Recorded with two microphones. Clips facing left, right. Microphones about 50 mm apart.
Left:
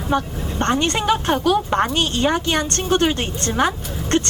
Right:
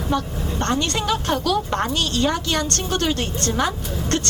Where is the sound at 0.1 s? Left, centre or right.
Left.